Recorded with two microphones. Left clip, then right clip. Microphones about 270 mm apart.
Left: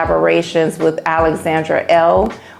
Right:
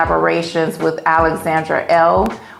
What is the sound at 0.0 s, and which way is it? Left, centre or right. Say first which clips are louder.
Speech: left 1 dB; left.